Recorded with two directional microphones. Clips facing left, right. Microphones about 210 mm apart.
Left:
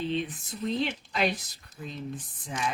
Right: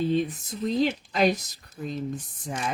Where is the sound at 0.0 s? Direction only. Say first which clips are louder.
Right 6 dB; 45° right (ahead or behind).